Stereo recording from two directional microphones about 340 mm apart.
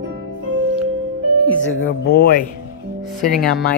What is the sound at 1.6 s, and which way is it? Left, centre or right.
Speech, left.